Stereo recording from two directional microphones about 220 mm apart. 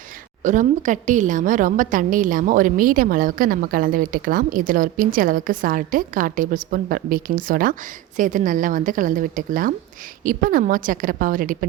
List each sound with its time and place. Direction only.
0.4 s a woman's voice: 35° right (ahead or behind)